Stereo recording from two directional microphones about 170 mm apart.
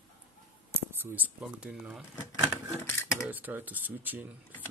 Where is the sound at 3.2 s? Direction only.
10° right (ahead or behind).